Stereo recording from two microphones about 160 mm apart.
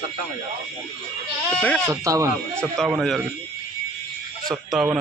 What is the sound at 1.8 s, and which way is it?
Speech, 20° right (ahead or behind).